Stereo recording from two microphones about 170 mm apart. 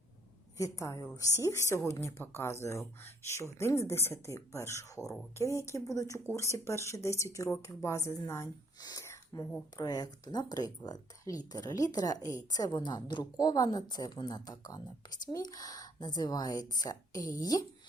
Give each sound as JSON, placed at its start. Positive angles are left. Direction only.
{"t": 0.5, "sound": "speech", "side_deg": 15}